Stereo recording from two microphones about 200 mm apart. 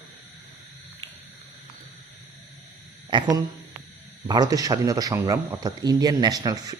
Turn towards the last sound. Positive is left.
turn(degrees=-15)  # may be behind; listen again after turning